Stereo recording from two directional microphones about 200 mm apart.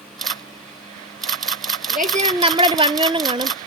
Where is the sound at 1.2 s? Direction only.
Centre (ahead or behind).